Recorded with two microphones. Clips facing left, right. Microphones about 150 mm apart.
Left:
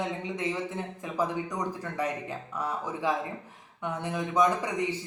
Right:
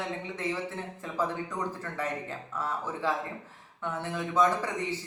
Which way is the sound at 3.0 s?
15° left (ahead or behind).